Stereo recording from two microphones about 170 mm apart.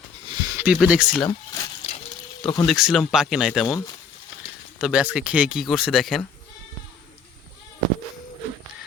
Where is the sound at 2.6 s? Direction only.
Centre (ahead or behind).